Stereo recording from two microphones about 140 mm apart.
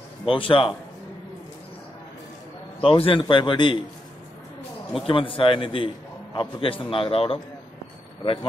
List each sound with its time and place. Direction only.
0.3 s a man's voice: 40° left (ahead or behind)
2.8 s a man's voice: 40° left (ahead or behind)
5.0 s a man's voice: 40° left (ahead or behind)